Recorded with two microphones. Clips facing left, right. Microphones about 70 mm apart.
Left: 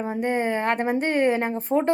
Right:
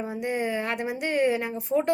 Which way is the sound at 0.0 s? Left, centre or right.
Left.